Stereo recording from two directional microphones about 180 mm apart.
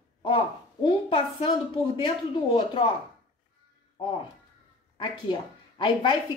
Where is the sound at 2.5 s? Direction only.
25° left (ahead or behind).